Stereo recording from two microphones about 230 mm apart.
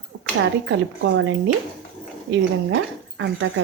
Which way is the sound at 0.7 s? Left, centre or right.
Right.